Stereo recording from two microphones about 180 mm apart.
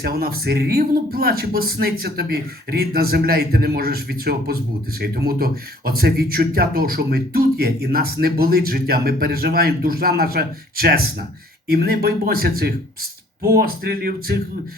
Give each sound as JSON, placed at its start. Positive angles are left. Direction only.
{"t": 0.0, "sound": "speech", "side_deg": -60}